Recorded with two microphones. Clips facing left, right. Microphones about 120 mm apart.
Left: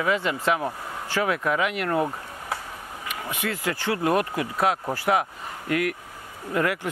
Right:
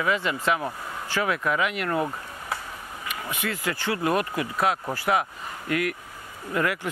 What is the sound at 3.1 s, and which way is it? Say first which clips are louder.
Speech: left 1 dB; 50° left (ahead or behind).